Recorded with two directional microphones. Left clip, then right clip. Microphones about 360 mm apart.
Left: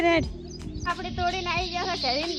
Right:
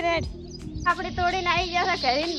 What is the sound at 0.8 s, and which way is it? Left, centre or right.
Speech, centre.